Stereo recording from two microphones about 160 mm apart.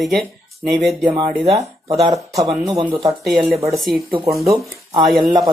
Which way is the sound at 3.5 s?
20° right (ahead or behind).